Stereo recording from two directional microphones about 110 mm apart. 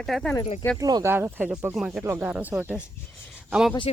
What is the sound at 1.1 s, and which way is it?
Speech, 15° right (ahead or behind).